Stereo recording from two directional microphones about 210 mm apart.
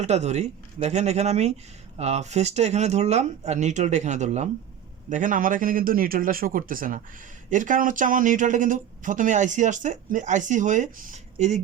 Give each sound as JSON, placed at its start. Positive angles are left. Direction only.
{"t": 0.0, "sound": "speech", "side_deg": -35}